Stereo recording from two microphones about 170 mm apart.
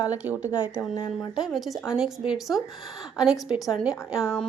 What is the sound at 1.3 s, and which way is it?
A woman's voice, centre (ahead or behind).